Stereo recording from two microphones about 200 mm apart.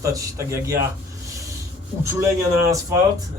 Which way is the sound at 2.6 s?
15° right (ahead or behind).